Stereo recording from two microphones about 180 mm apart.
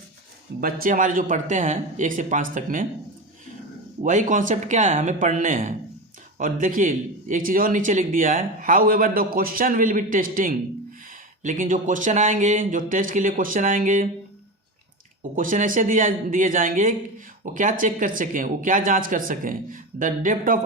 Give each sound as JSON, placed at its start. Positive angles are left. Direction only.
{"t": 0.6, "sound": "a man's voice", "side_deg": -50}
{"t": 4.0, "sound": "a man's voice", "side_deg": -45}
{"t": 15.4, "sound": "a man's voice", "side_deg": -45}